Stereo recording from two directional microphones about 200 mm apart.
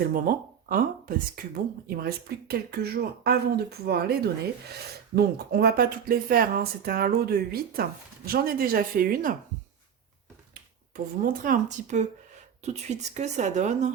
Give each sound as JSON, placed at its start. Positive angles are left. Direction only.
{"t": 0.1, "sound": "speech", "side_deg": -45}
{"t": 10.5, "sound": "speech", "side_deg": -45}